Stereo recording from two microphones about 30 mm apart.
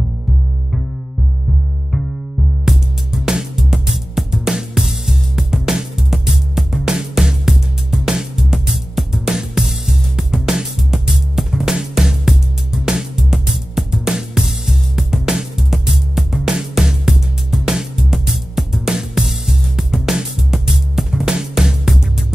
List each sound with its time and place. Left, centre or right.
2.6 s music: centre